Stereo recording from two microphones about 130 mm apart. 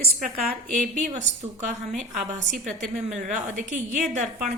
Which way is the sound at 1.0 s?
60° right (ahead or behind).